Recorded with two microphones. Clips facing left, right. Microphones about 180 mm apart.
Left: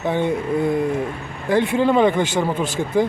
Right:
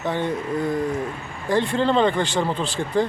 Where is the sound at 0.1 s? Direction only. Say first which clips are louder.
Left 4 dB; 15° left (ahead or behind).